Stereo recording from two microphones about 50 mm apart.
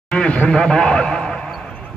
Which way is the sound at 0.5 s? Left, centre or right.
Centre.